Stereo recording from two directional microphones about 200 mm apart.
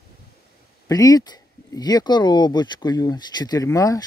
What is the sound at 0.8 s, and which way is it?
Speech, 20° left (ahead or behind).